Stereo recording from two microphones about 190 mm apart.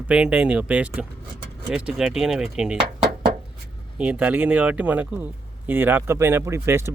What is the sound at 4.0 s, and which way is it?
Speech, 5° right (ahead or behind).